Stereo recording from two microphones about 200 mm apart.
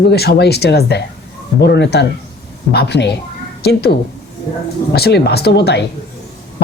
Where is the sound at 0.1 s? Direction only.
55° left (ahead or behind).